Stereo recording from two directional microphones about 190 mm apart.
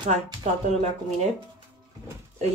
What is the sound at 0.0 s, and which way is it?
Speech, 35° right (ahead or behind).